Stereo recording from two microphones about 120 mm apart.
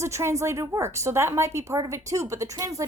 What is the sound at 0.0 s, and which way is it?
A woman's voice, 25° right (ahead or behind).